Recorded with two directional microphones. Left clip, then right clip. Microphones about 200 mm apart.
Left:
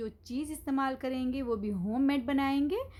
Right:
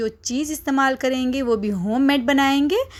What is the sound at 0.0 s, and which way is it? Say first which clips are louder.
A woman's voice: right 13 dB; 30° right (ahead or behind).